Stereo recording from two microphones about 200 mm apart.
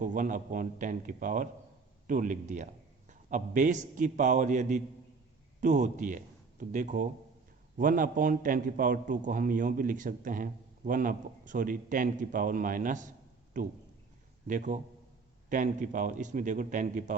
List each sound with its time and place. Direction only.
0.0 s a man's voice: 40° right (ahead or behind)